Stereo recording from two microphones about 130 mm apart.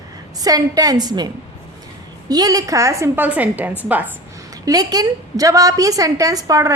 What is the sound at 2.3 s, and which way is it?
A woman's voice, 30° right (ahead or behind).